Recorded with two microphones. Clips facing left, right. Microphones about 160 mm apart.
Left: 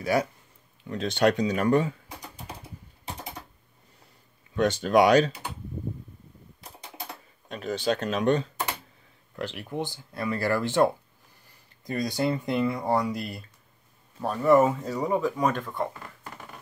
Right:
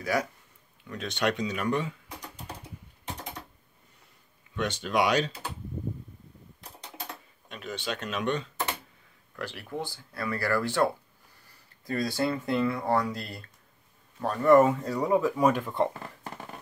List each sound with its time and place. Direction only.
0.0 s speech: 25° left (ahead or behind)
2.0 s typing: 10° left (ahead or behind)
3.2 s typewriter: 10° left (ahead or behind)
4.6 s speech: 40° left (ahead or behind)
6.6 s typewriter: 10° left (ahead or behind)
7.4 s speech: 40° left (ahead or behind)
9.3 s speech: 20° left (ahead or behind); by 15.7 s 10° right (ahead or behind)